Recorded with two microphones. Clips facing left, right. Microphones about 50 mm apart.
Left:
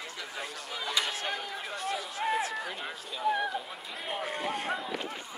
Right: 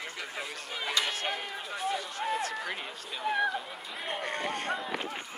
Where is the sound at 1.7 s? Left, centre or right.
Centre.